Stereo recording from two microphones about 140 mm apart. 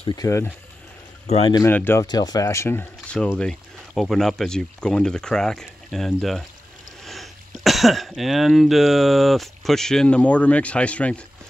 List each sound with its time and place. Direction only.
0.1 s speech: 25° left (ahead or behind)
1.2 s speech: 50° left (ahead or behind)
1.7 s speech: 15° left (ahead or behind)
2.0 s speech: 30° left (ahead or behind); by 11.2 s 10° left (ahead or behind)